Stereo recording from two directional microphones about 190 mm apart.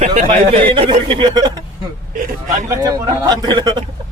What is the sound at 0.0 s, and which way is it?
Speech, 35° right (ahead or behind).